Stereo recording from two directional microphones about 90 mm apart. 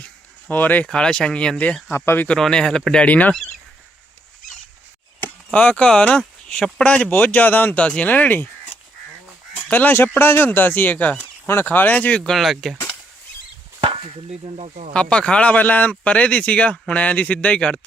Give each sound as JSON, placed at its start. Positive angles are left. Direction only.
{"t": 0.0, "sound": "a sound", "side_deg": 15}
{"t": 0.9, "sound": "speech", "side_deg": 10}
{"t": 1.9, "sound": "speech", "side_deg": 25}
{"t": 5.5, "sound": "speech", "side_deg": 15}
{"t": 12.3, "sound": "speech", "side_deg": 0}
{"t": 14.9, "sound": "speech", "side_deg": 10}